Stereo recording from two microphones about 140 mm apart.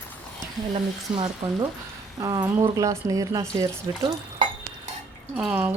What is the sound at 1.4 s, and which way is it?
Speech, 50° right (ahead or behind).